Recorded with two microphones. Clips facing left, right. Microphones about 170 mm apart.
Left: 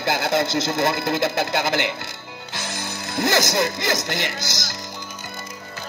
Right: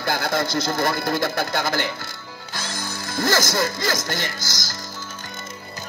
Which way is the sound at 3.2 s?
20° left (ahead or behind).